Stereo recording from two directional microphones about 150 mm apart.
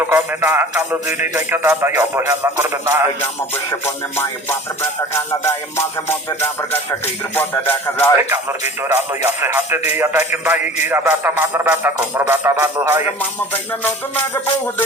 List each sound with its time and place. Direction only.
0.0 s speech: 15° right (ahead or behind)
3.7 s music: 15° left (ahead or behind)
8.1 s speech: 15° right (ahead or behind)